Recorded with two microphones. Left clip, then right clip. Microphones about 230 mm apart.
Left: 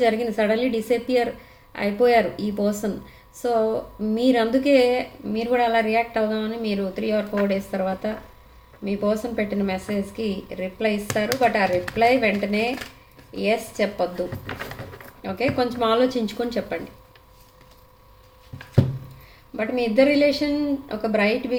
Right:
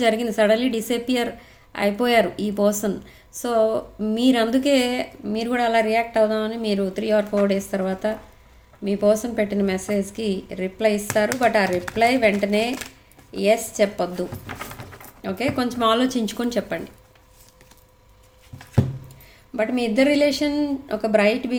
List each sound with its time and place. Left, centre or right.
0.0 s a woman's voice: right
15.2 s a woman's voice: right
19.5 s a woman's voice: right